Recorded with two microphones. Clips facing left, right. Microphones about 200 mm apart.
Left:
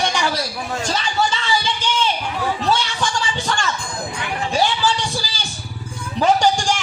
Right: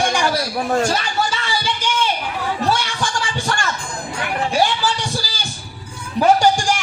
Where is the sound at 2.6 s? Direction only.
10° right (ahead or behind).